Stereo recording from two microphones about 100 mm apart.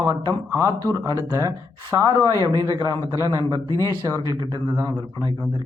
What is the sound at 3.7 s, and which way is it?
Speech, 35° left (ahead or behind).